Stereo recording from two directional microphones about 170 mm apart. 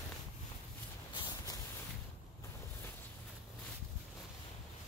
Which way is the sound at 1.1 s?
25° left (ahead or behind).